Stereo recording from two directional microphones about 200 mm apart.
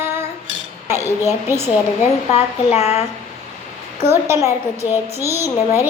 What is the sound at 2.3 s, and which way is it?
Speech, 30° left (ahead or behind).